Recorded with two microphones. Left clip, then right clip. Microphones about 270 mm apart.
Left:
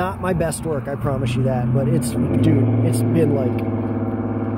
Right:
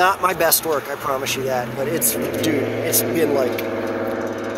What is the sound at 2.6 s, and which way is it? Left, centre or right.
Speech, right.